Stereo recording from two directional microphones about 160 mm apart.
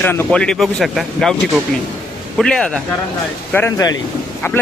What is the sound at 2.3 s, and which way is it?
Speech, 5° left (ahead or behind).